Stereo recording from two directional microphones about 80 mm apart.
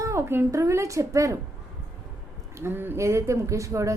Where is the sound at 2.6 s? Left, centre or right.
Right.